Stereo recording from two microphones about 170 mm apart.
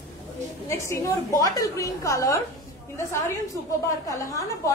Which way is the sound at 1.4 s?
20° left (ahead or behind).